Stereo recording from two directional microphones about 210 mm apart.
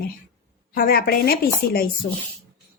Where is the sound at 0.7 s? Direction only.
45° left (ahead or behind).